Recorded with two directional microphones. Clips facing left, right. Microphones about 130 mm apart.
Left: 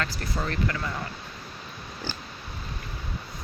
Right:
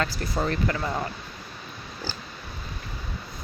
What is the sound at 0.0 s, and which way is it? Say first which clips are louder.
Speech: right 4 dB; 25° right (ahead or behind).